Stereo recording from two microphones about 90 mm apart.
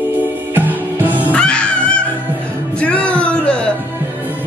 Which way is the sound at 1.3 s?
10° left (ahead or behind).